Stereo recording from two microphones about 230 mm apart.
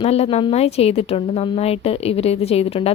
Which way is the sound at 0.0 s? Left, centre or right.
Left.